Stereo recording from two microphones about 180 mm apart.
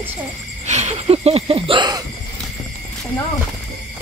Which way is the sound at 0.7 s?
40° right (ahead or behind).